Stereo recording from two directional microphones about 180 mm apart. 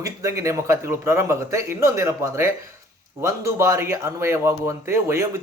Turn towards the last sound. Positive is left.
turn(degrees=-15)  # may be behind; listen again after turning